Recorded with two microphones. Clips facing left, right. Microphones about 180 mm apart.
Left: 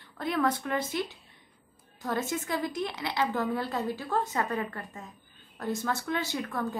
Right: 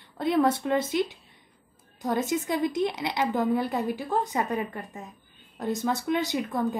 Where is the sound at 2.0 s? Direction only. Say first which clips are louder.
Right 5 dB; 15° right (ahead or behind).